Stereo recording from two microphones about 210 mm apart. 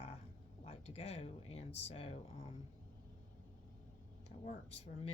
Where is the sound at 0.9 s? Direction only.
30° left (ahead or behind).